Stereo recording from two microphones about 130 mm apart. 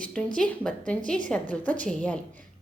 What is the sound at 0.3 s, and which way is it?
A woman's voice, 10° left (ahead or behind).